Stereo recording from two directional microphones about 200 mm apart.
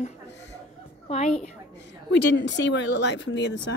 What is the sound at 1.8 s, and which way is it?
A woman's voice, 60° left (ahead or behind).